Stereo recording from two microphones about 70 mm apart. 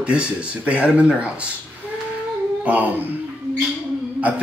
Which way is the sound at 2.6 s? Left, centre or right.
Right.